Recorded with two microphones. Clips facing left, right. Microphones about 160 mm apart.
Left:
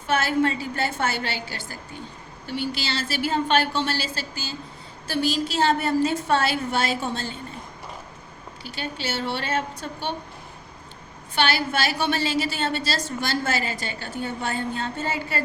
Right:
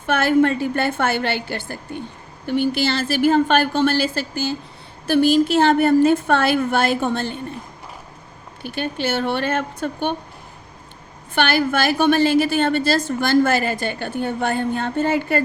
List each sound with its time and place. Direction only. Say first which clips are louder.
0.1 s a woman's voice: right 6 dB; 55° right (ahead or behind)
8.6 s a woman's voice: right 8 dB; 55° right (ahead or behind)
11.3 s a woman's voice: right 5 dB; 55° right (ahead or behind)